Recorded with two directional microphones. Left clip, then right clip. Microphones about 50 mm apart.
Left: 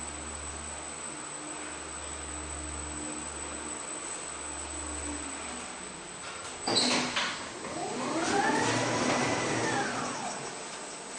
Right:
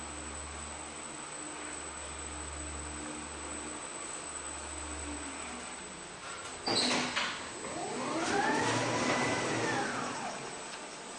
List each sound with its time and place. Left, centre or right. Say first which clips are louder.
6.7 s sliding door: left 3 dB; centre
7.9 s vehicle: left 3 dB; centre
8.9 s a sound: left 2 dB; centre